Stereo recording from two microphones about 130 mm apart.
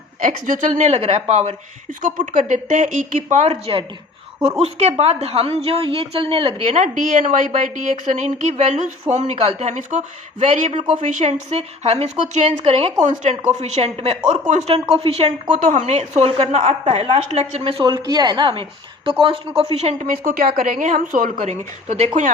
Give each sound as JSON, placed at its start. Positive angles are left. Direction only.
{"t": 0.2, "sound": "a woman's voice", "side_deg": -90}
{"t": 2.0, "sound": "speech", "side_deg": -90}
{"t": 3.2, "sound": "a woman's voice", "side_deg": -60}
{"t": 4.6, "sound": "a woman's voice", "side_deg": -55}
{"t": 13.1, "sound": "a woman's voice", "side_deg": -60}
{"t": 14.3, "sound": "a woman's voice", "side_deg": -60}
{"t": 14.7, "sound": "a woman's voice", "side_deg": -50}
{"t": 15.7, "sound": "a woman's voice", "side_deg": -60}